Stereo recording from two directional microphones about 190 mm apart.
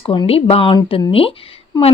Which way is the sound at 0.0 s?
30° left (ahead or behind).